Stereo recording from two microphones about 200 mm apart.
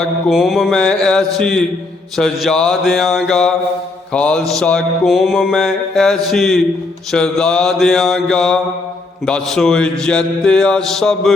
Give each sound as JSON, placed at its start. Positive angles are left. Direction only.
{"t": 0.0, "sound": "mantra", "side_deg": 0}